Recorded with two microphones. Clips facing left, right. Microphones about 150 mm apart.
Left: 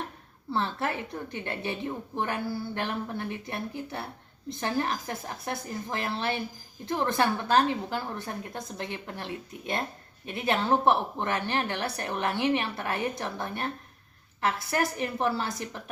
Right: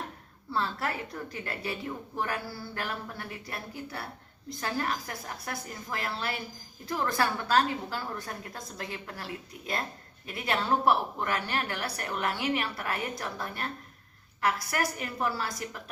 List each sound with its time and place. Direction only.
0.5 s a woman's voice: 25° left (ahead or behind)